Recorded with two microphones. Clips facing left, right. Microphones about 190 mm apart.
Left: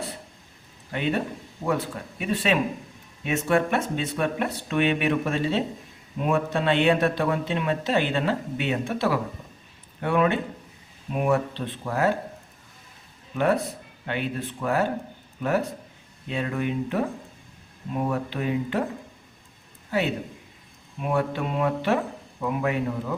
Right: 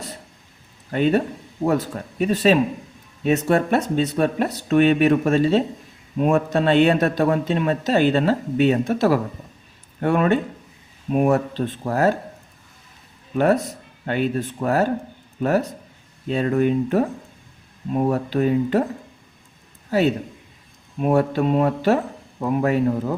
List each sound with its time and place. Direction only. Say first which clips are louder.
0.9 s a man's voice: right 7 dB; 40° right (ahead or behind)
13.3 s a man's voice: right 5 dB; 40° right (ahead or behind)
19.9 s a man's voice: right 6 dB; 40° right (ahead or behind)